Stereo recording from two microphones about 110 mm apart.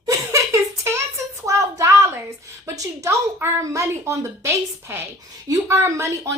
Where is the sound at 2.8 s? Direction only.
25° right (ahead or behind).